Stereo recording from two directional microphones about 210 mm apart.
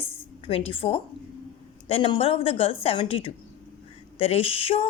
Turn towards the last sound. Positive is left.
turn(degrees=25)  # may be behind; listen again after turning